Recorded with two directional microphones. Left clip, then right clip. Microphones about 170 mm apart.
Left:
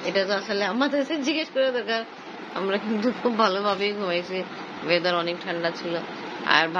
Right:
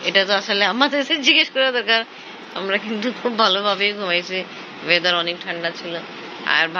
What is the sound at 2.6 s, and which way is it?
Speech, 15° left (ahead or behind).